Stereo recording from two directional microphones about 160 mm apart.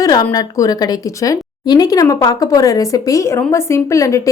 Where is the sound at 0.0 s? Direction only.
25° left (ahead or behind).